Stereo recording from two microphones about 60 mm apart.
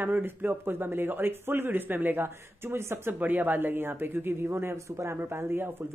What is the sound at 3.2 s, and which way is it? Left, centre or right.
Speech, right.